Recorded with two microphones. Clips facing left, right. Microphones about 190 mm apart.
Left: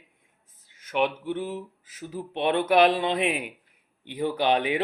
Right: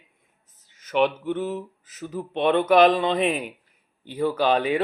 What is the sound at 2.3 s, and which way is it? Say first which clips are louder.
Speech: right 4 dB; 10° left (ahead or behind).